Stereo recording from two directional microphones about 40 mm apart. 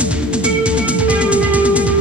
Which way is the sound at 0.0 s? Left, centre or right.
Right.